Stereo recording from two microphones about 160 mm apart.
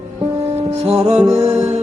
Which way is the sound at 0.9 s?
40° right (ahead or behind).